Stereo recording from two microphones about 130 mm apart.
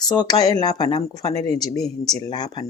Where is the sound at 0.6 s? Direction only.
30° left (ahead or behind).